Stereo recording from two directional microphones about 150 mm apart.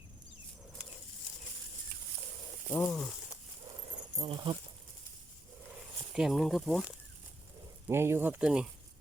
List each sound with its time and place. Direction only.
2.7 s speech: 5° left (ahead or behind)
4.2 s speech: 30° right (ahead or behind)
6.1 s speech: centre (ahead or behind)
7.9 s speech: 15° right (ahead or behind)